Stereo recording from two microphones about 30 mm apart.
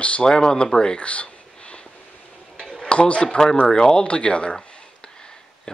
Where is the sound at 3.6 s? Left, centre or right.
Left.